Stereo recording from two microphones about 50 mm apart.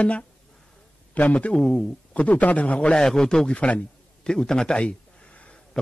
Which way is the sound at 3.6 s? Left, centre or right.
Left.